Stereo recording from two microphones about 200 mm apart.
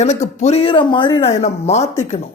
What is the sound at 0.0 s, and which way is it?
Speech, 35° left (ahead or behind).